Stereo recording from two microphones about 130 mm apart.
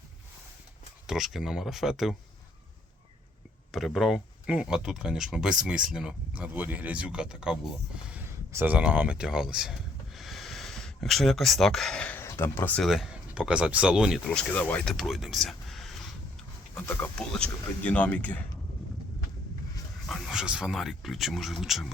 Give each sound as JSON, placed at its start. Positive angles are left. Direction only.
{"t": 1.0, "sound": "speech", "side_deg": 0}
{"t": 3.7, "sound": "speech", "side_deg": 0}
{"t": 10.2, "sound": "a sound", "side_deg": 0}
{"t": 12.2, "sound": "speech", "side_deg": 20}
{"t": 12.8, "sound": "speech", "side_deg": 0}
{"t": 14.3, "sound": "speech", "side_deg": 10}
{"t": 20.1, "sound": "speech", "side_deg": 0}